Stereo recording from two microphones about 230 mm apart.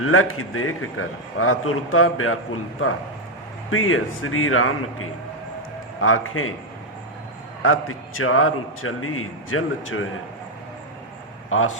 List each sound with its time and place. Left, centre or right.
0.0 s a man's voice: left
3.7 s a man's voice: left
7.6 s a man's voice: left
11.4 s speech: left